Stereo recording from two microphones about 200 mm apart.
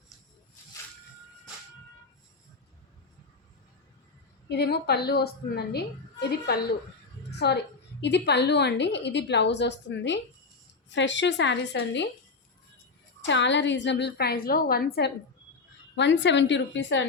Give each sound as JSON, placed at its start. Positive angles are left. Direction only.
{"t": 4.4, "sound": "a woman's voice", "side_deg": 55}
{"t": 7.3, "sound": "a sound", "side_deg": 55}
{"t": 8.0, "sound": "a woman's voice", "side_deg": 60}
{"t": 13.2, "sound": "a woman's voice", "side_deg": 65}